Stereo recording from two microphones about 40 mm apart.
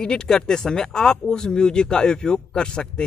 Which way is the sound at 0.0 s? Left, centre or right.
Centre.